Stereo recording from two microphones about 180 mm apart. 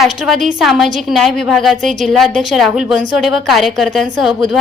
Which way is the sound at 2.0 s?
Centre (ahead or behind).